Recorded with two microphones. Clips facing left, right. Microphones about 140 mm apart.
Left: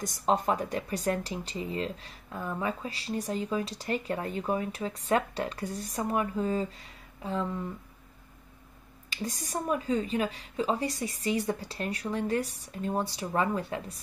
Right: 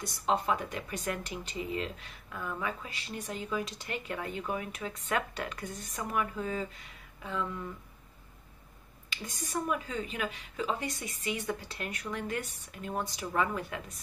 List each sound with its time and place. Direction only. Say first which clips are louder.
0.0 s speech: left 3 dB; 45° left (ahead or behind)
9.1 s speech: left 2 dB; 35° left (ahead or behind)